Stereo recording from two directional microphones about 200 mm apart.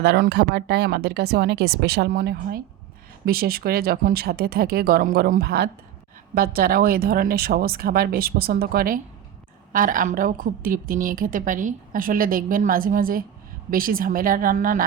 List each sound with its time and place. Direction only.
0.0 s a woman's voice: 55° right (ahead or behind)